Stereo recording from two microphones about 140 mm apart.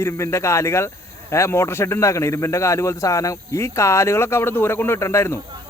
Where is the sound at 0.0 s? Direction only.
20° left (ahead or behind).